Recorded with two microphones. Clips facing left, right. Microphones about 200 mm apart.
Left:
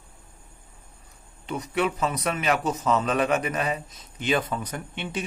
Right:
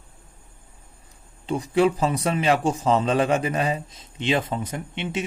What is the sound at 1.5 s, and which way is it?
A man's voice, 30° right (ahead or behind).